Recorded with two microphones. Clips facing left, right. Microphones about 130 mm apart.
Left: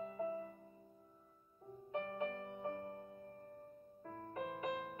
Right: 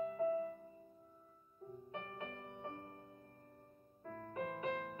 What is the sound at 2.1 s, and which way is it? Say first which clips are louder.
Music: left 6 dB; 35° left (ahead or behind).